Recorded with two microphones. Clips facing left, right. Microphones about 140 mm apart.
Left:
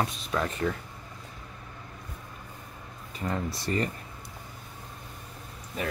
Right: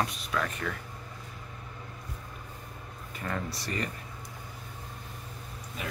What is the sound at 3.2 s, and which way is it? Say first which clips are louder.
Speech: left 3 dB; 15° left (ahead or behind).